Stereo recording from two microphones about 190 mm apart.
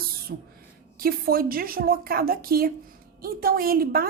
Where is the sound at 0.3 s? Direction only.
60° right (ahead or behind).